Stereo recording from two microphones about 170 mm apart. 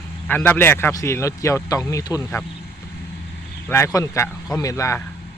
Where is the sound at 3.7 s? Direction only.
15° left (ahead or behind).